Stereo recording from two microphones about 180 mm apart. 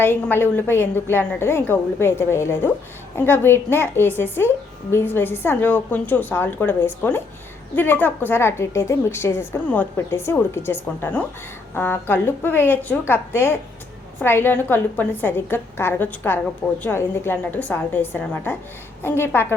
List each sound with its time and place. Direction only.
0.0 s a woman's voice: 10° left (ahead or behind)